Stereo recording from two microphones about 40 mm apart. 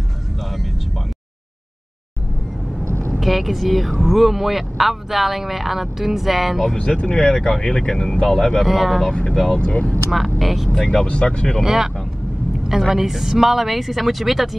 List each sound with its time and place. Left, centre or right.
0.4 s vehicle: centre
3.2 s speech: centre
6.8 s speech: left; by 8.6 s centre
8.6 s speech: centre
9.3 s speech: centre
9.6 s speech: left
10.1 s speech: centre
10.7 s speech: centre
11.1 s speech: left
11.6 s speech: centre